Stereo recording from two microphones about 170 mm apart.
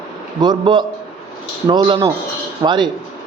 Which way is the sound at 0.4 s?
25° right (ahead or behind).